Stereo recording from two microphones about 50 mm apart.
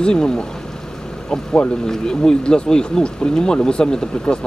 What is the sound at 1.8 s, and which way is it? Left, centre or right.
Speech, centre.